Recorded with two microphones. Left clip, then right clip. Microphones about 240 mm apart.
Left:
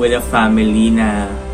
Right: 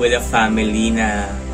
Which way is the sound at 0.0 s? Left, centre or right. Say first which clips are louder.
Left 2 dB; centre.